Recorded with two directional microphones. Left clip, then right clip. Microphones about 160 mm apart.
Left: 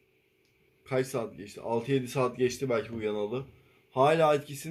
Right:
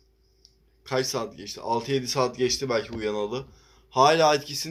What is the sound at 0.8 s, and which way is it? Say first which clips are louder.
A man's voice: right 4 dB; 15° left (ahead or behind).